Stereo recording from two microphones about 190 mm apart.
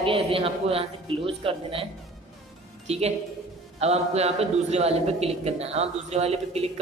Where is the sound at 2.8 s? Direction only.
35° right (ahead or behind).